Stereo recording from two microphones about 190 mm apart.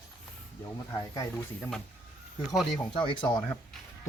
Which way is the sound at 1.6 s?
5° left (ahead or behind).